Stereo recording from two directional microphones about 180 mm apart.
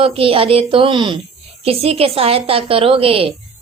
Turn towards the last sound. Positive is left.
turn(degrees=-30)  # may be behind; listen again after turning